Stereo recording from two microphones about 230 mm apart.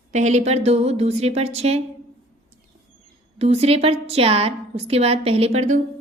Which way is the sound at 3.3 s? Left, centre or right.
Right.